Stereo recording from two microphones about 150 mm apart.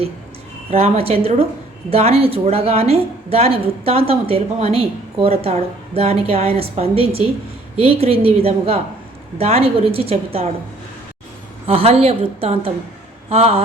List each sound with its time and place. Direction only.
0.7 s a woman's voice: 40° right (ahead or behind)
11.6 s a woman's voice: 40° right (ahead or behind)